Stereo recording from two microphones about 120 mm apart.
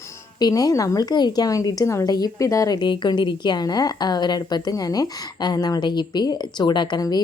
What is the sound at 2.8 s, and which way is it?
A woman's voice, 40° left (ahead or behind).